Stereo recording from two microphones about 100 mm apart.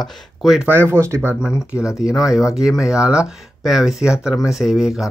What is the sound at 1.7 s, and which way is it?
Speech, 10° right (ahead or behind).